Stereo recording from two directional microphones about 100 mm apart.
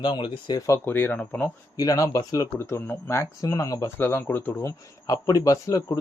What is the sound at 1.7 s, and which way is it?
A man's voice, 35° left (ahead or behind).